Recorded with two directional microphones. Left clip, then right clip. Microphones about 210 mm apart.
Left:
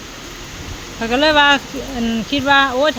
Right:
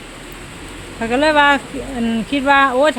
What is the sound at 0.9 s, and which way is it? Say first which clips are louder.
Speech: even; centre (ahead or behind).